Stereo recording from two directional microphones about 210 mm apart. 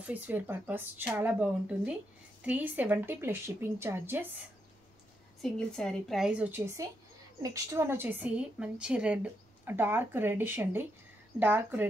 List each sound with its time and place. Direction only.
0.0 s a woman's voice: 10° right (ahead or behind)
5.4 s a woman's voice: 5° left (ahead or behind)